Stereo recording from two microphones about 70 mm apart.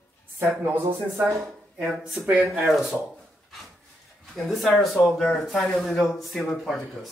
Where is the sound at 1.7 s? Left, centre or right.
Centre.